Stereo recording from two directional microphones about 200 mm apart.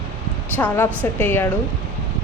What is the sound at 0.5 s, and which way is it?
Speech, 10° left (ahead or behind).